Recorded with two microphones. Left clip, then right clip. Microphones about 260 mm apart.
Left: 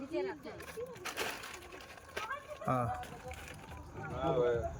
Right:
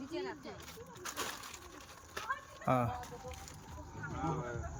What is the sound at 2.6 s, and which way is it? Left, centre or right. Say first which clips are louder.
Speech: right 2 dB; centre.